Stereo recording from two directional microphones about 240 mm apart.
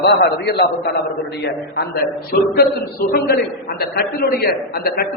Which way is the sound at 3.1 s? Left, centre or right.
Left.